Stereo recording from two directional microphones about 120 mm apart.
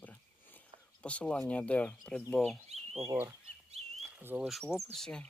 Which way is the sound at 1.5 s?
10° left (ahead or behind).